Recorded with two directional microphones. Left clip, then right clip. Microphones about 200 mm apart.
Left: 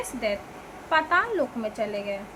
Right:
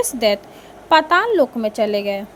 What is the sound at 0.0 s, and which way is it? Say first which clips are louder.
A woman's voice: right 11 dB; 35° right (ahead or behind).